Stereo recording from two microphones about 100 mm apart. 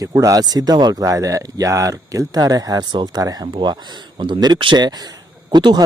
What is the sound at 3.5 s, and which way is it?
Speech, 55° right (ahead or behind).